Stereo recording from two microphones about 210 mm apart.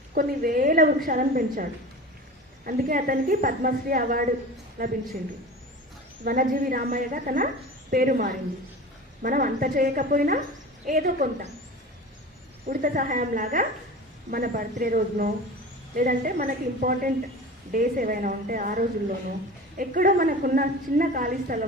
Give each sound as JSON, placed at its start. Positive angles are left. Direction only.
{"t": 0.1, "sound": "a woman's voice", "side_deg": -40}
{"t": 2.6, "sound": "a woman's voice", "side_deg": -40}
{"t": 6.2, "sound": "a woman's voice", "side_deg": -40}
{"t": 12.6, "sound": "a woman's voice", "side_deg": -40}